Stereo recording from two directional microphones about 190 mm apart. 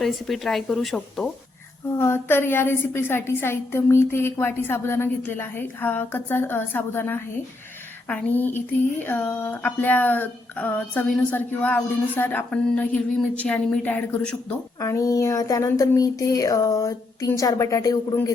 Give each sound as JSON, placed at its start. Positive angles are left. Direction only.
{"t": 0.0, "sound": "speech", "side_deg": 0}